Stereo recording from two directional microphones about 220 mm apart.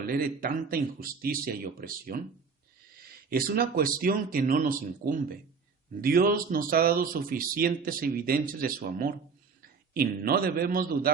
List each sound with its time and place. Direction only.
0.0 s a man's voice: 40° right (ahead or behind)